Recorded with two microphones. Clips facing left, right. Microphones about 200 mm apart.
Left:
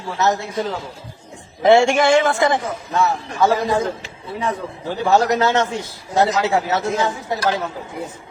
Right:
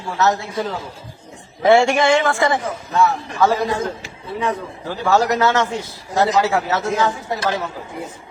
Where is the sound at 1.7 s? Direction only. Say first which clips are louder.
Left 1 dB; 20° left (ahead or behind).